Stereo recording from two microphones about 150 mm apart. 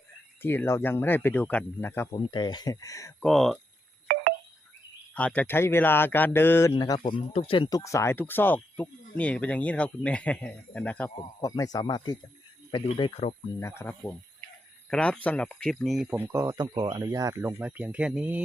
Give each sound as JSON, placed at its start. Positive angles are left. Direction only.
{"t": 0.4, "sound": "speech", "side_deg": 15}
{"t": 2.1, "sound": "speech", "side_deg": 35}
{"t": 3.2, "sound": "speech", "side_deg": 0}
{"t": 4.1, "sound": "a sound", "side_deg": -75}
{"t": 5.1, "sound": "speech", "side_deg": 10}
{"t": 7.1, "sound": "speech", "side_deg": 40}
{"t": 7.8, "sound": "speech", "side_deg": 20}
{"t": 11.2, "sound": "speech", "side_deg": 30}
{"t": 13.0, "sound": "speech", "side_deg": 40}
{"t": 13.6, "sound": "speech", "side_deg": 15}
{"t": 14.8, "sound": "speech", "side_deg": 5}
{"t": 16.1, "sound": "speech", "side_deg": -15}